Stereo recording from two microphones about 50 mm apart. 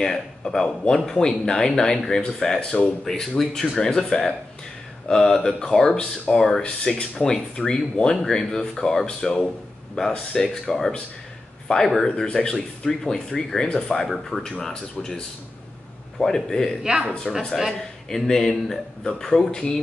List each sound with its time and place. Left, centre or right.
0.0 s speech: centre
12.3 s speech: left
16.8 s speech: centre
18.1 s speech: centre